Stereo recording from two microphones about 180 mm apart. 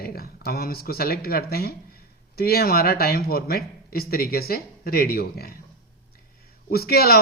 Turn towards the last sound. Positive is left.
turn(degrees=60)  # may be behind; listen again after turning